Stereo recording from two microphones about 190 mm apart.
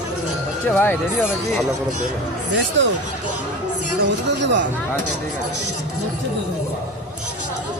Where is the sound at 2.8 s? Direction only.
75° right (ahead or behind).